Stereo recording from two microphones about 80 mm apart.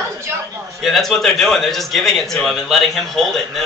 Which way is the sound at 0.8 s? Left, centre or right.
Centre.